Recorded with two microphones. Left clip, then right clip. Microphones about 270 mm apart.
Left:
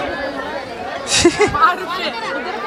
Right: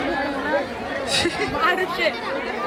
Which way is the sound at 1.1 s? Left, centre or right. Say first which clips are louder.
Left 9 dB; centre.